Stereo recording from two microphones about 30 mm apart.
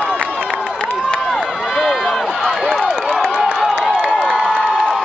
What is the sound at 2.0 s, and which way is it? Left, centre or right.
Run, centre.